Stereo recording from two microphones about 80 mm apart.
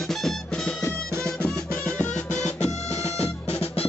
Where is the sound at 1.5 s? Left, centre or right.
Centre.